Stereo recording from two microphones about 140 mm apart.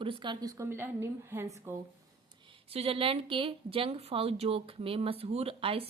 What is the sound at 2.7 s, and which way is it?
A woman's voice, 45° right (ahead or behind).